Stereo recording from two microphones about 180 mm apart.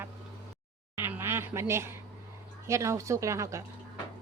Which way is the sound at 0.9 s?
10° right (ahead or behind).